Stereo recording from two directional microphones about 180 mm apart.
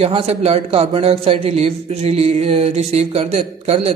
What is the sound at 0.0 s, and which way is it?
A man's voice, 35° right (ahead or behind).